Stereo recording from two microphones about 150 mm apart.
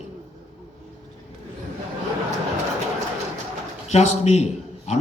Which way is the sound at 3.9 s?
50° left (ahead or behind).